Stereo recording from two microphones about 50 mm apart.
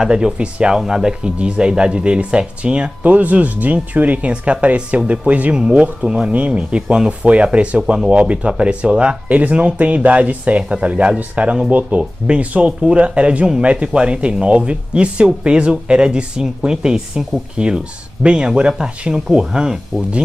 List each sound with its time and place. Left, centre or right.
0.0 s speech: centre
7.8 s speech: centre
8.1 s speech: right